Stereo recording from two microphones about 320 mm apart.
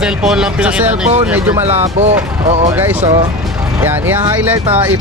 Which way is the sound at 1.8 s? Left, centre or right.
Right.